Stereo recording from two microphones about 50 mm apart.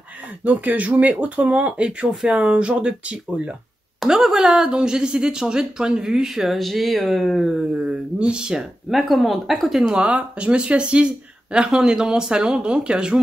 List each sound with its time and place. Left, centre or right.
0.4 s speech: right
4.1 s speech: centre
7.7 s speech: right
8.9 s speech: centre
9.9 s speech: right